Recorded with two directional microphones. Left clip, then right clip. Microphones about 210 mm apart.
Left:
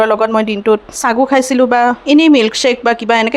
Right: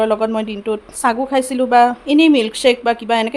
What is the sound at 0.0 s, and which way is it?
Speech, 20° left (ahead or behind).